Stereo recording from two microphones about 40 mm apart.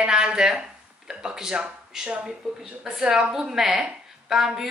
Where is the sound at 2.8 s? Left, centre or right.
Centre.